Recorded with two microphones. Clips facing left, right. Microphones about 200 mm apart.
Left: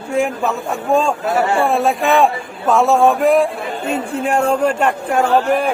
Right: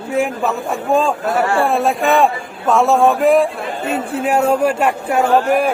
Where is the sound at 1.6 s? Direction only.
Centre (ahead or behind).